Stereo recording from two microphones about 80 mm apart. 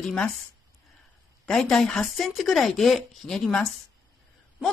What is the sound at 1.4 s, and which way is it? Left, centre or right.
Speech, centre.